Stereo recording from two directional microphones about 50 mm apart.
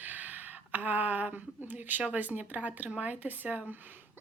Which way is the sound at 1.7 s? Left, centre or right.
Right.